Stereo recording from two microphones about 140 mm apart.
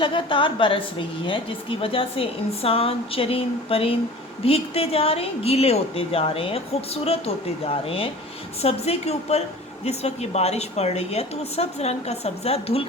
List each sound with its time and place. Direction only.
0.0 s a woman's voice: 35° left (ahead or behind)